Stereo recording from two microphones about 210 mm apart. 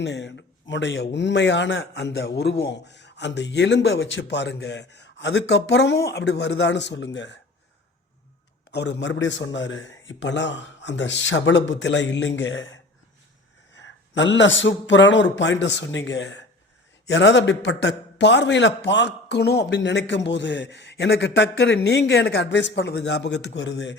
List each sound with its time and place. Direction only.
0.0 s speech: 55° left (ahead or behind)
8.7 s speech: 55° left (ahead or behind)